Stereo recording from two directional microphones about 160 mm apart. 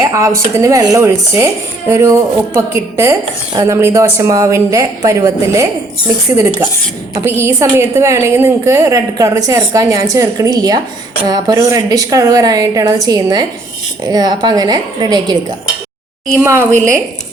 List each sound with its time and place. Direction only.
0.0 s speech: 20° right (ahead or behind)
16.4 s a woman's voice: 15° right (ahead or behind)